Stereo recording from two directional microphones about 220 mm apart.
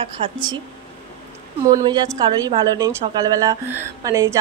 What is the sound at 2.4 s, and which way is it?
A woman's voice, 20° right (ahead or behind).